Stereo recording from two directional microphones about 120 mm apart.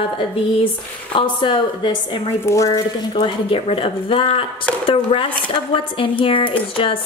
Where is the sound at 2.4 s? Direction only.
25° left (ahead or behind).